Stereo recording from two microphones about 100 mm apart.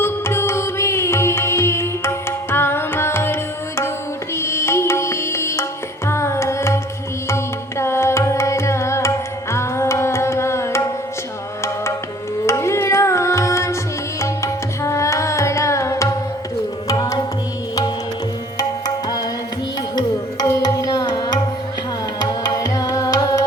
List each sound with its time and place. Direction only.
0.0 s music: 25° left (ahead or behind)
4.4 s music: 25° left (ahead or behind)
6.1 s carnatic music: 30° left (ahead or behind)
7.3 s music: 25° left (ahead or behind)
12.5 s tabla: 30° left (ahead or behind)
16.9 s tabla: 40° left (ahead or behind)
20.6 s tabla: 40° left (ahead or behind)
22.2 s music: 45° left (ahead or behind)